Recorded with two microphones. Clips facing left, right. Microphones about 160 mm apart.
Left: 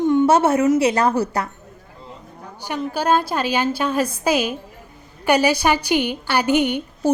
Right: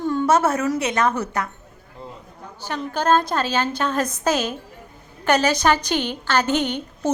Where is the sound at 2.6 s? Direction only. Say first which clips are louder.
Even; 10° left (ahead or behind).